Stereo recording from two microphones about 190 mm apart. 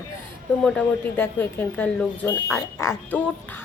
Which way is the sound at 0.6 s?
5° left (ahead or behind).